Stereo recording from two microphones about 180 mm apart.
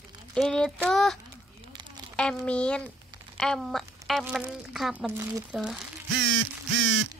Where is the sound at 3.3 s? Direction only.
5° left (ahead or behind).